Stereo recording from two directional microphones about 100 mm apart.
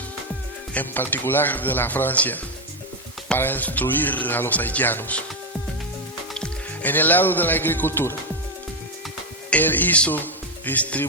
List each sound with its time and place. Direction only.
0.7 s speech: 15° left (ahead or behind)
6.3 s speech: 15° left (ahead or behind)
9.5 s speech: 15° left (ahead or behind)